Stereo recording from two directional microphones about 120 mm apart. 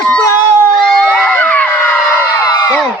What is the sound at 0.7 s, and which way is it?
Crowd, 5° left (ahead or behind).